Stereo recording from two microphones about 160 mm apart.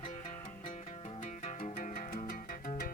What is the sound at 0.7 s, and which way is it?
Music, 45° left (ahead or behind).